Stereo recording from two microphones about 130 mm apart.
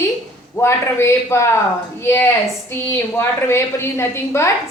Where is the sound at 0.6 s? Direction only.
20° left (ahead or behind).